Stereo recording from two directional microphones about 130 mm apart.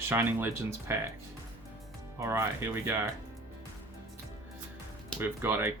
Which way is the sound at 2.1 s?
20° right (ahead or behind).